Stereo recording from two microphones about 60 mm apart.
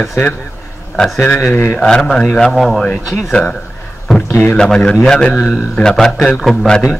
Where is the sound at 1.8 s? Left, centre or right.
Centre.